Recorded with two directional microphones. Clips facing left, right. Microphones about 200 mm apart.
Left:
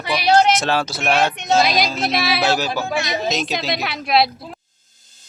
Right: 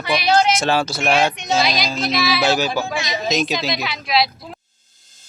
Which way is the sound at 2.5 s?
Centre (ahead or behind).